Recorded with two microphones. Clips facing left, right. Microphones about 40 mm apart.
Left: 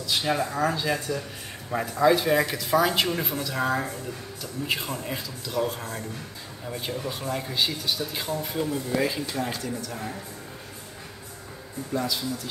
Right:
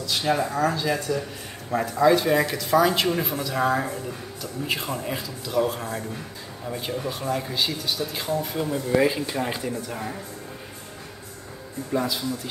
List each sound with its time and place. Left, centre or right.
0.0 s speech: centre
11.9 s speech: centre